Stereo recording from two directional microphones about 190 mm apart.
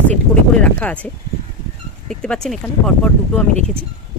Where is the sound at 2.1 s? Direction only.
5° left (ahead or behind).